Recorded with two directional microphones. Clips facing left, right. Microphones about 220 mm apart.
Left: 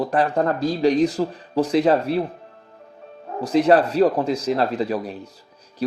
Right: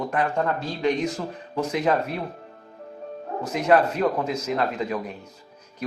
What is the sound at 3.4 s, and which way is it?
Speech, 35° left (ahead or behind).